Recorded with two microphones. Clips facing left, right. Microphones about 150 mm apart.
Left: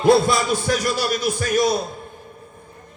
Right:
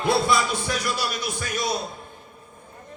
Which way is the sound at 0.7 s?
45° left (ahead or behind).